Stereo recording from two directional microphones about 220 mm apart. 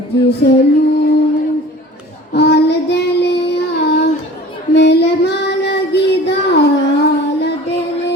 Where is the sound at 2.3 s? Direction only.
50° left (ahead or behind).